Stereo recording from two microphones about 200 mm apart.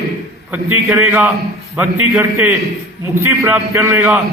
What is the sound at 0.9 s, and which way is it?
A man's voice, 10° right (ahead or behind).